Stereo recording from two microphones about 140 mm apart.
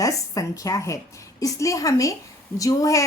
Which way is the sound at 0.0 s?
25° left (ahead or behind).